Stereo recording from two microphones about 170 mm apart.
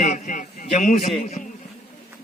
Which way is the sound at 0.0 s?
45° left (ahead or behind).